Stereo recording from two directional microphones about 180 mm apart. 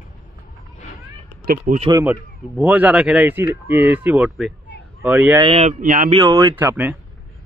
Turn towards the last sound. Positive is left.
turn(degrees=-10)  # may be behind; listen again after turning